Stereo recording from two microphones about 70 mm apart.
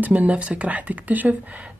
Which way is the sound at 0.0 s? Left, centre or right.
Right.